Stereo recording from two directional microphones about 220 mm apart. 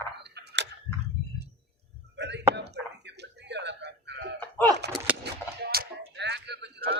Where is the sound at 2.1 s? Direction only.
50° right (ahead or behind).